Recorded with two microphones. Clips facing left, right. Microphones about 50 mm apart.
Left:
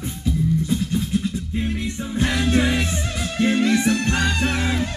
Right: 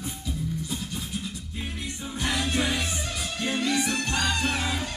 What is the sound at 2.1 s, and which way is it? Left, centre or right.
A capella, left.